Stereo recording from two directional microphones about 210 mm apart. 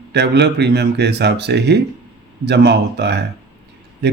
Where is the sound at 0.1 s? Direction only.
55° right (ahead or behind).